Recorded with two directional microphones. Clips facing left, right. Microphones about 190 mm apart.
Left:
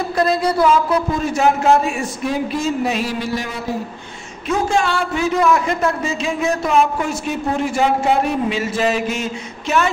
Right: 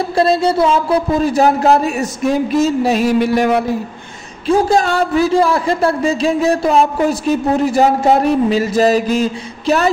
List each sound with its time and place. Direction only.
0.1 s a man's voice: 30° right (ahead or behind)
3.2 s speech: 60° right (ahead or behind)
4.5 s a man's voice: 35° right (ahead or behind)